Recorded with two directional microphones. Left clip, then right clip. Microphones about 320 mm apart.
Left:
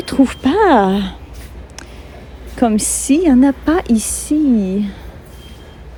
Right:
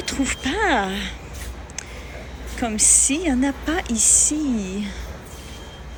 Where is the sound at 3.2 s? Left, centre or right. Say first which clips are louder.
Left 10 dB; centre.